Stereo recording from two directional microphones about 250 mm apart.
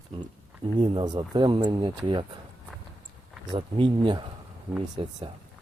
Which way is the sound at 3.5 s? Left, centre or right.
Centre.